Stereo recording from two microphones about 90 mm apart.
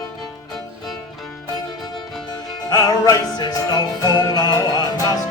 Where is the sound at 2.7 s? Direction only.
50° left (ahead or behind).